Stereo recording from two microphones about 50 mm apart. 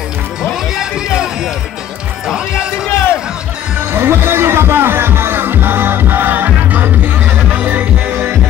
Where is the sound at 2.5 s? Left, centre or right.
Left.